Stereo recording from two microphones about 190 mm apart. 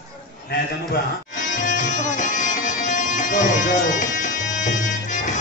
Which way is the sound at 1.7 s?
40° left (ahead or behind).